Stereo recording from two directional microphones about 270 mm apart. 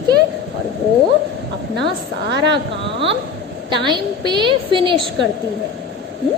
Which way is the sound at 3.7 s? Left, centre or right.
Centre.